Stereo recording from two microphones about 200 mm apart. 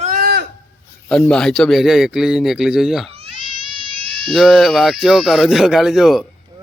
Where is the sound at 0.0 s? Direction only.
45° right (ahead or behind).